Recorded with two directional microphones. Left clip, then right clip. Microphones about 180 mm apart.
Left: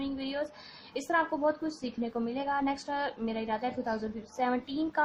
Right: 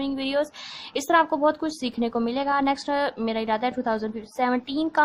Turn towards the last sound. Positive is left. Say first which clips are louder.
# right 7 dB
turn(degrees=-30)  # may be behind; listen again after turning